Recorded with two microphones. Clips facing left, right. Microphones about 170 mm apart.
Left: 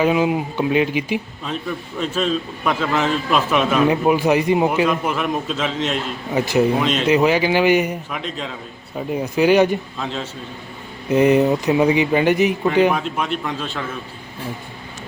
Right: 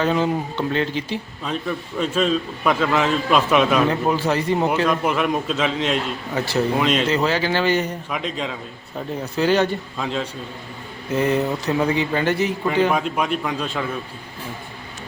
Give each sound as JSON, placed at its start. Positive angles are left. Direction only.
{"t": 0.0, "sound": "a man's voice", "side_deg": 10}
{"t": 3.8, "sound": "a man's voice", "side_deg": 15}
{"t": 6.3, "sound": "speech", "side_deg": 15}
{"t": 6.7, "sound": "a man's voice", "side_deg": 0}
{"t": 7.1, "sound": "speech", "side_deg": 15}
{"t": 8.1, "sound": "a man's voice", "side_deg": 0}
{"t": 9.0, "sound": "speech", "side_deg": 10}
{"t": 10.0, "sound": "a man's voice", "side_deg": 0}
{"t": 11.1, "sound": "speech", "side_deg": 15}
{"t": 12.9, "sound": "a man's voice", "side_deg": 0}